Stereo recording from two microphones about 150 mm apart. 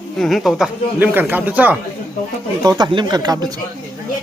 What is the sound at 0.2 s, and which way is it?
Speech, centre (ahead or behind).